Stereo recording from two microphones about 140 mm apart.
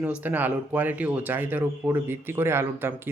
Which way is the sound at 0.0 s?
10° right (ahead or behind).